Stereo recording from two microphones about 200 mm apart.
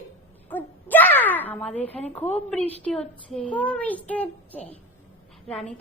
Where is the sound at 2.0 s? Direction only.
35° left (ahead or behind).